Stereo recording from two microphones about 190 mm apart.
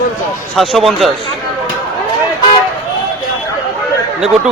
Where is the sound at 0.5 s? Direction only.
Centre (ahead or behind).